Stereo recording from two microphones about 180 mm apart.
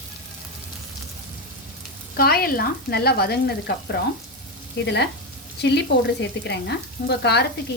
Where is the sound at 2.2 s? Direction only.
55° left (ahead or behind).